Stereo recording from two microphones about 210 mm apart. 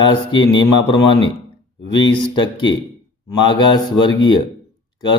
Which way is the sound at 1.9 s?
20° left (ahead or behind).